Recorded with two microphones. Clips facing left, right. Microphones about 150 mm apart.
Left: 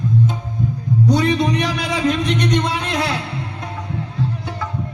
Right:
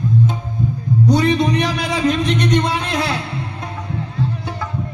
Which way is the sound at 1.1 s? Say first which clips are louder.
Right 2 dB; 25° right (ahead or behind).